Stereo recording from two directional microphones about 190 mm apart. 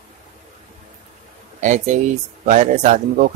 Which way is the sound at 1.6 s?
40° right (ahead or behind).